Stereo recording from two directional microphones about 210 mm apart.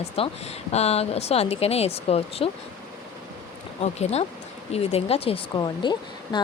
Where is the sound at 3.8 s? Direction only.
30° left (ahead or behind).